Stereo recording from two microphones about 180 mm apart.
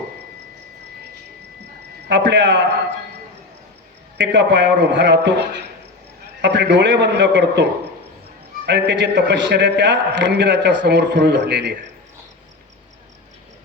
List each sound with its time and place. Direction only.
2.0 s a man's voice: 80° right
4.2 s a man's voice: 75° right (ahead or behind)